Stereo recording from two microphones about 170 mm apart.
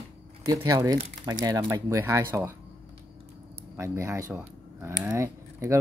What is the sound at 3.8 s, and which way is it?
Speech, 15° right (ahead or behind).